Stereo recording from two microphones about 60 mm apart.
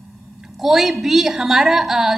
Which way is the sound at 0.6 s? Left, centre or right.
Centre.